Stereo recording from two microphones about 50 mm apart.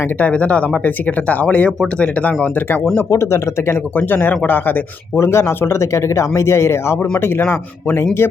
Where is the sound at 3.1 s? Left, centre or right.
Left.